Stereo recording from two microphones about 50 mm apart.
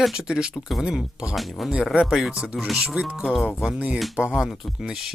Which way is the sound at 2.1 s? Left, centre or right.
Centre.